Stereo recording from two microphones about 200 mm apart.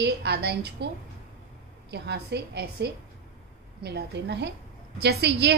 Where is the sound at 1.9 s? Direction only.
55° right (ahead or behind).